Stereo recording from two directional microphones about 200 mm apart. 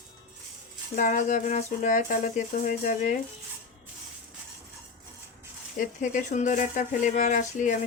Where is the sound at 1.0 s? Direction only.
40° left (ahead or behind).